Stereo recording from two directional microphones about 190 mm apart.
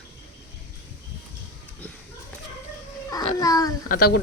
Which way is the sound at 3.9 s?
55° left (ahead or behind).